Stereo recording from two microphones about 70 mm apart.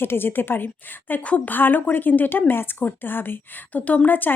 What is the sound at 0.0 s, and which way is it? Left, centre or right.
A woman's voice, left.